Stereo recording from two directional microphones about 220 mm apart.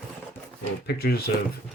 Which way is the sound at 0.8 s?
45° left (ahead or behind).